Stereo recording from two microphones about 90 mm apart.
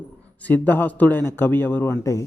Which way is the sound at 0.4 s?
20° left (ahead or behind).